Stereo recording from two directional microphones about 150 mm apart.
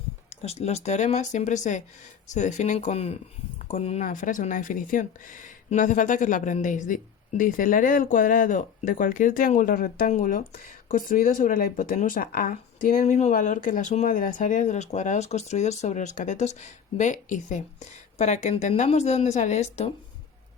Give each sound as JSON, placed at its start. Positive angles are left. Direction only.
{"t": 0.4, "sound": "speech", "side_deg": 45}